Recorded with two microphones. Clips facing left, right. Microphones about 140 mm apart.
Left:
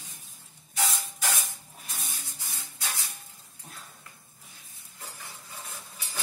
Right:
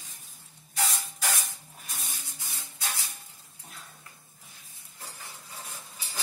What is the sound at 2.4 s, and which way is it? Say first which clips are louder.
Maraca: right 2 dB; 20° right (ahead or behind).